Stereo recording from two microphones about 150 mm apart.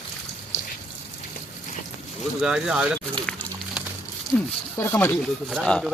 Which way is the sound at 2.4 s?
5° right (ahead or behind).